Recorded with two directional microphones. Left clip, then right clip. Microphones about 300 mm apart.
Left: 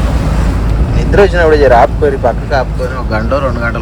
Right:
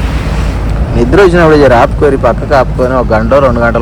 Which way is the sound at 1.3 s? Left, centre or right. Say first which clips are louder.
Right 2 dB; right.